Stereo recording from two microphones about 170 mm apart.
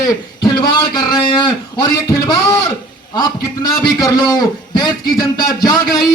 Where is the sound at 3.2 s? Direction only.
25° left (ahead or behind).